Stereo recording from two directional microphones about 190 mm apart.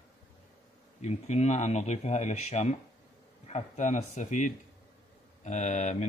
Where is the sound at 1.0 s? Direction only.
35° left (ahead or behind).